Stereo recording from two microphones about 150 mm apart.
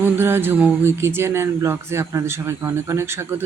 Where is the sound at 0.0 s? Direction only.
15° right (ahead or behind).